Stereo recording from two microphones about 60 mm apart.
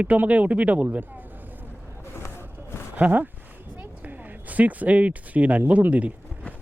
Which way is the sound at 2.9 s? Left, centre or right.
Right.